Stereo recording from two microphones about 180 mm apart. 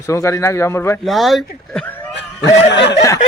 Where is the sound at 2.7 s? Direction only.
75° left (ahead or behind).